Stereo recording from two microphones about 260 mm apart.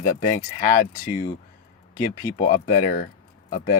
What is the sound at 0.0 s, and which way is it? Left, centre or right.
Speech, left.